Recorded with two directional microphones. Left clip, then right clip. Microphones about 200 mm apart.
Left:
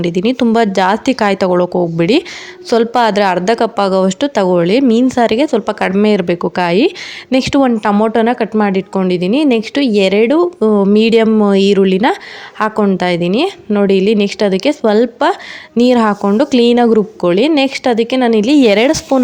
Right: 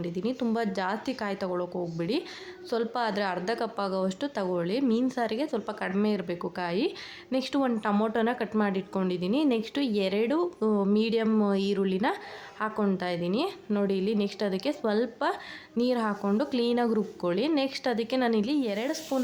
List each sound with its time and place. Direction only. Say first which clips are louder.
0.0 s a woman's voice: left 17 dB; 35° left (ahead or behind)